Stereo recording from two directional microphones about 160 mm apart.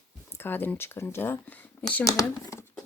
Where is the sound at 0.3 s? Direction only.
15° left (ahead or behind).